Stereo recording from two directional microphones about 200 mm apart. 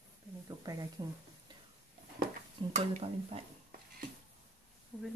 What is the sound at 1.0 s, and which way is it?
Speech, 25° right (ahead or behind).